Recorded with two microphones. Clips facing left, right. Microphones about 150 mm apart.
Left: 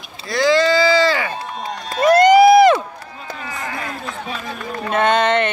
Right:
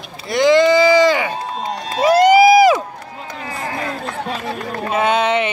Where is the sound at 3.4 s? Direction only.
30° right (ahead or behind).